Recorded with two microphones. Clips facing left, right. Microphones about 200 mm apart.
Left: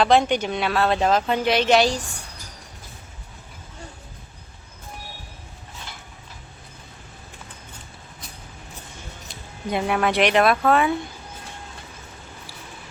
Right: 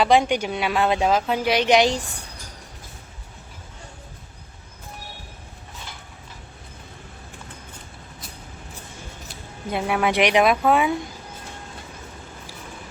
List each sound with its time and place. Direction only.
0.0 s speech: 10° right (ahead or behind)
9.6 s a woman's voice: 5° right (ahead or behind)
10.1 s speech: 15° right (ahead or behind)